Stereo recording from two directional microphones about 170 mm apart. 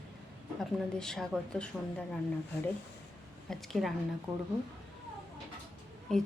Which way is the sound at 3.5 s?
Centre (ahead or behind).